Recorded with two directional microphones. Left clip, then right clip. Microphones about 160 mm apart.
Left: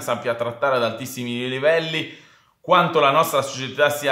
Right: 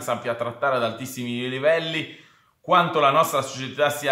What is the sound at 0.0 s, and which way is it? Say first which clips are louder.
A man's voice: left 3 dB; 20° left (ahead or behind).